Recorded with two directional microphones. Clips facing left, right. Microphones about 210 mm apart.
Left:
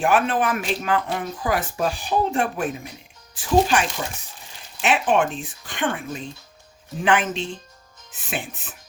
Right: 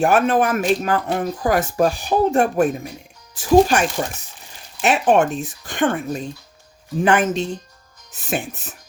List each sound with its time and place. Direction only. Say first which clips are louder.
0.0 s speech: right 4 dB; 45° right (ahead or behind)